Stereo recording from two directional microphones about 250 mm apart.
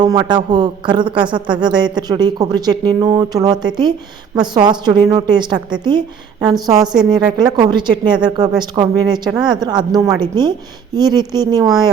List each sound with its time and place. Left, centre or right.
0.0 s speech: centre
6.8 s a woman's voice: centre
7.1 s speech: centre